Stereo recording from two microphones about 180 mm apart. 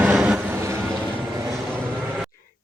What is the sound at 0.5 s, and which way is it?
Vehicle, 15° right (ahead or behind).